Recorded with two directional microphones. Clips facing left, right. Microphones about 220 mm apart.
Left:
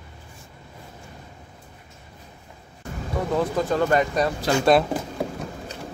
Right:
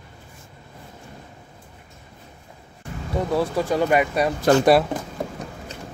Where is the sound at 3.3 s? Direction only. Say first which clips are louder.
Even; 10° right (ahead or behind).